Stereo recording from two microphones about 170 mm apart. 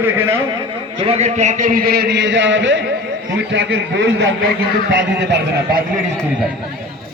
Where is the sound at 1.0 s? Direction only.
35° right (ahead or behind); by 3.7 s 90° right.